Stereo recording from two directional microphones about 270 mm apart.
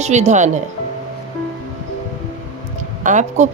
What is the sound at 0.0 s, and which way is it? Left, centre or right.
Speech, right.